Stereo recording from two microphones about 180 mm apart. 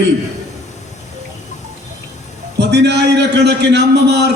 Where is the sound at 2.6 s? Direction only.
70° right (ahead or behind).